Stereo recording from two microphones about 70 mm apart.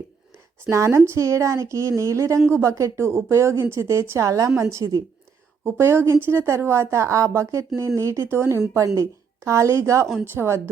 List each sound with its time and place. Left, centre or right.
0.7 s a woman's voice: right
5.6 s a woman's voice: right